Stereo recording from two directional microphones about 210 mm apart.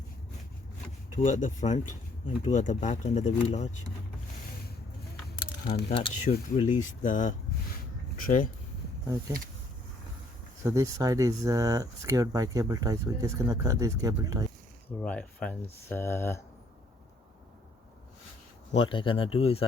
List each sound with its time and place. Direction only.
1.2 s speech: 35° left (ahead or behind)
5.9 s speech: 25° left (ahead or behind); by 8.4 s 40° left (ahead or behind)
10.6 s speech: 15° right (ahead or behind)
15.0 s speech: 5° left (ahead or behind)
18.7 s speech: 25° left (ahead or behind)